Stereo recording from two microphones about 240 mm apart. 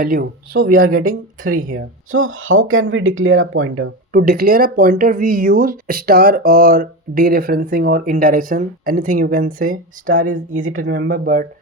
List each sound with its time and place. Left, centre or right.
0.0 s speech: right
1.7 s speech: right
4.1 s speech: right